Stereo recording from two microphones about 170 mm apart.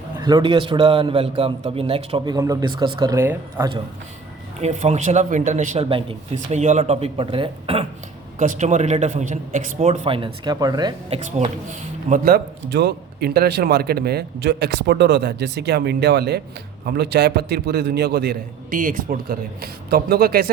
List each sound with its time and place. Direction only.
0.2 s a man's voice: 25° right (ahead or behind)
4.6 s a man's voice: 40° right (ahead or behind)
8.4 s speech: 45° right (ahead or behind); by 10.9 s 25° right (ahead or behind)
11.1 s speech: 40° right (ahead or behind)
12.2 s speech: 70° right (ahead or behind)